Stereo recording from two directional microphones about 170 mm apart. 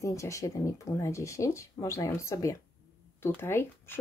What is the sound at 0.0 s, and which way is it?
Speech, 20° left (ahead or behind).